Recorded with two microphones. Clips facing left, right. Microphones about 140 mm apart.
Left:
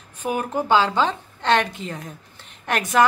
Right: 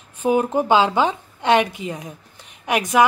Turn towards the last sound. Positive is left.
turn(degrees=-10)  # may be behind; listen again after turning